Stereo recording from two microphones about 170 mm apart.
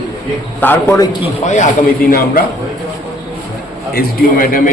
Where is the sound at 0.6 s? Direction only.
15° left (ahead or behind).